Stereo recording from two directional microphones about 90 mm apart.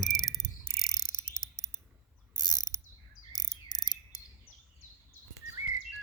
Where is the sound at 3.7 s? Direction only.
50° left (ahead or behind).